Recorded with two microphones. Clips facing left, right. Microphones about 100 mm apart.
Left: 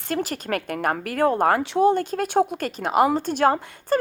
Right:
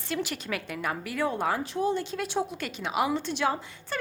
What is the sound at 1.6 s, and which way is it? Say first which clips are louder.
A woman's voice: left 9 dB; 75° left (ahead or behind).